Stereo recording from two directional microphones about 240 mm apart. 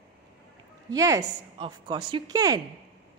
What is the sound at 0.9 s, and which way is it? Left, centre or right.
A woman's voice, centre.